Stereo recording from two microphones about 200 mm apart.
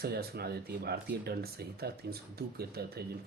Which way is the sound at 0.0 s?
50° right (ahead or behind).